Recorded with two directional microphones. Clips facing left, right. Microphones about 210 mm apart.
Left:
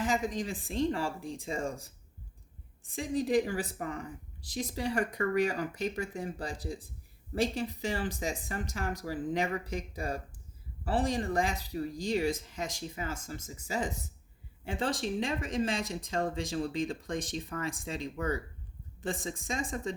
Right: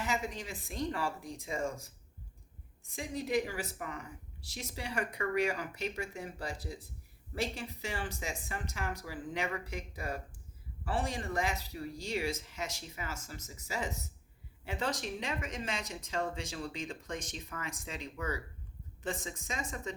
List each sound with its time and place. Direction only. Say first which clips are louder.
0.0 s speech: left 5 dB; 30° left (ahead or behind)